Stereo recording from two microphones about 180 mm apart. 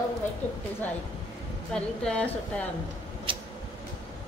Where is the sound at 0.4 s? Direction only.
40° left (ahead or behind).